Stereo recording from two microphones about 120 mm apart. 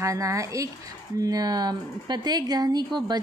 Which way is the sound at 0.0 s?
25° right (ahead or behind).